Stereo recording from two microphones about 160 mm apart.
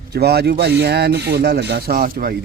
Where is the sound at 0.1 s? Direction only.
90° right; by 2.4 s 70° right (ahead or behind).